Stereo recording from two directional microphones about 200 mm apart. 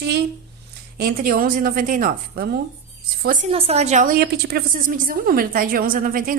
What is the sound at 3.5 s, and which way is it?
A woman's voice, 30° right (ahead or behind).